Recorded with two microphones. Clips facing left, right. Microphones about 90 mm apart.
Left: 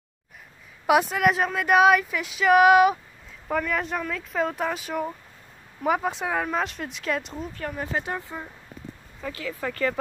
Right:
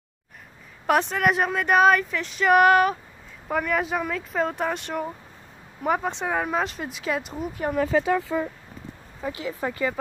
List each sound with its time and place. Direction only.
0.8 s speech: 5° left (ahead or behind)
3.4 s speech: 5° right (ahead or behind)
7.7 s speech: 90° right
9.2 s speech: 20° right (ahead or behind)